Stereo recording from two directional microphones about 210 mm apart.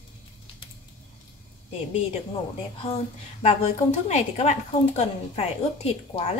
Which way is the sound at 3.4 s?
30° left (ahead or behind).